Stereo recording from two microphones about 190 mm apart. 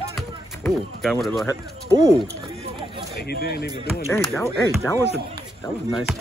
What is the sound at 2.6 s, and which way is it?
Run, 25° right (ahead or behind).